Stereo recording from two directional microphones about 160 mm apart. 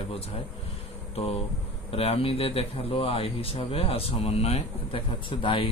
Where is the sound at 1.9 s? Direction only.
40° left (ahead or behind).